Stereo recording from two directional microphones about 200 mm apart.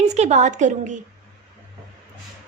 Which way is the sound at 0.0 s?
35° right (ahead or behind).